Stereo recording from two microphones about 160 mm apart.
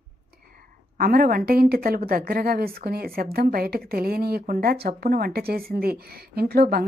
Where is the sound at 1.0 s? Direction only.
65° right (ahead or behind).